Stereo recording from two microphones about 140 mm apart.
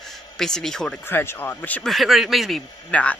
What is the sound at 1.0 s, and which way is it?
Speech, 15° left (ahead or behind).